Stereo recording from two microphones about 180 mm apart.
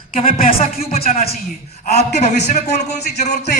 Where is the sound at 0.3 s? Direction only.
50° left (ahead or behind).